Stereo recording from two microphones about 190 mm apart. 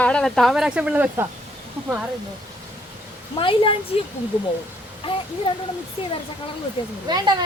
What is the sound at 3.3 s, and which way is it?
Speech, 30° left (ahead or behind).